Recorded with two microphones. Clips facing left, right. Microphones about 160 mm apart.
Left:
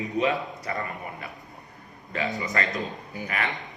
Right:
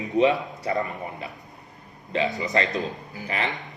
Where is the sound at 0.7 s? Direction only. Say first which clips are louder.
Right 7 dB; 30° right (ahead or behind).